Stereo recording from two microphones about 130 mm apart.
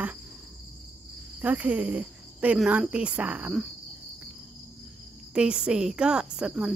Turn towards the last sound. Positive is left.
turn(degrees=-5)  # may be behind; listen again after turning